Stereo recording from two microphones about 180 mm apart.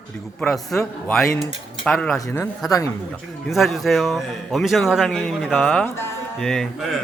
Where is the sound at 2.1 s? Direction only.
15° left (ahead or behind).